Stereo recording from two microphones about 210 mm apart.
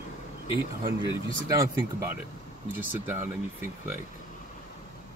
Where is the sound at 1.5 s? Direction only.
15° right (ahead or behind).